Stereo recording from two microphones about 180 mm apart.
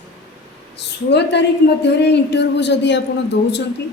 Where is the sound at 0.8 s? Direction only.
70° left (ahead or behind).